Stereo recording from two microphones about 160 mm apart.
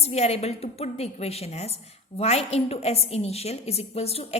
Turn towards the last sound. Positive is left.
turn(degrees=40)  # may be behind; listen again after turning